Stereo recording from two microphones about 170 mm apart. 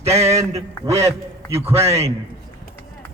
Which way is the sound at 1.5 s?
15° right (ahead or behind).